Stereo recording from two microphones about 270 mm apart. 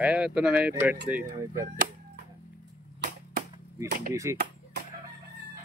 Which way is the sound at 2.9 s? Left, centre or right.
Right.